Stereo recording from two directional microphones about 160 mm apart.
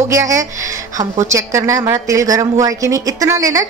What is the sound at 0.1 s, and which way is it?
A woman's voice, 20° right (ahead or behind).